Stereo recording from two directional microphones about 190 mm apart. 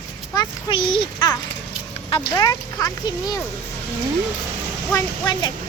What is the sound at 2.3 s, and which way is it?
Speech, 20° left (ahead or behind).